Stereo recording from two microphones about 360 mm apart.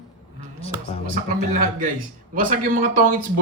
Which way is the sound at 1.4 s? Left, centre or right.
Right.